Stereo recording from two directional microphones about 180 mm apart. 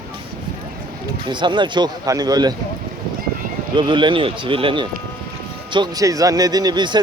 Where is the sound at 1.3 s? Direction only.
25° right (ahead or behind).